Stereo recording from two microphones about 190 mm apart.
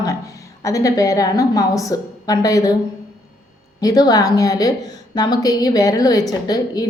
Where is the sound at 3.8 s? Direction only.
20° left (ahead or behind).